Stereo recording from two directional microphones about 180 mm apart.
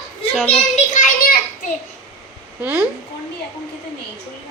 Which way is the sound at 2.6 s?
10° right (ahead or behind).